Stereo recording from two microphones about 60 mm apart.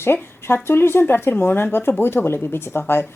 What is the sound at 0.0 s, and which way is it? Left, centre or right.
Speech, left.